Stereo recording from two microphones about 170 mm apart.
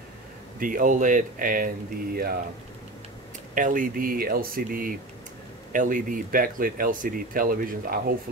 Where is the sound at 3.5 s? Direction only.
50° right (ahead or behind).